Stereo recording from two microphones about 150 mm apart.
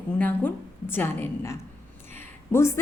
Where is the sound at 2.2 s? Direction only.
15° left (ahead or behind).